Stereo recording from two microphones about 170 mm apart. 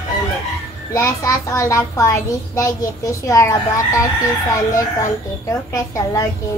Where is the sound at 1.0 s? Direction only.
20° left (ahead or behind).